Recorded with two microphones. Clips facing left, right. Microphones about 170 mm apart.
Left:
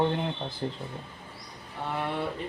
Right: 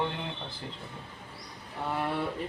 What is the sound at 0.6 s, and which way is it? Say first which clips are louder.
Speech: left 12 dB; 35° left (ahead or behind).